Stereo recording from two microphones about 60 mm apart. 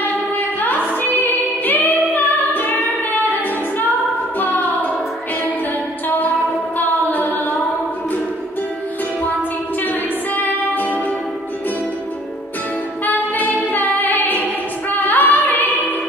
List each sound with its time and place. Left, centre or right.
0.6 s singing: left
4.4 s music: left
6.0 s music: left
10.3 s music: left
13.0 s music: left